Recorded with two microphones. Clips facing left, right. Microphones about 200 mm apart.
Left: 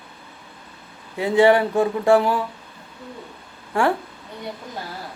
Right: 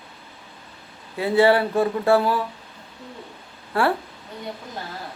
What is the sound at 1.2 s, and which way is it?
Speech, 15° left (ahead or behind).